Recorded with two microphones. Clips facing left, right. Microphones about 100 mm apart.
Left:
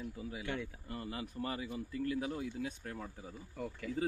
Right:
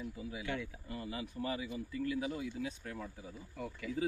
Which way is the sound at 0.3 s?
45° left (ahead or behind).